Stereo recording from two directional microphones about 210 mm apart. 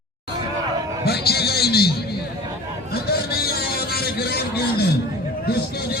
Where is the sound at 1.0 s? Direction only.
50° left (ahead or behind).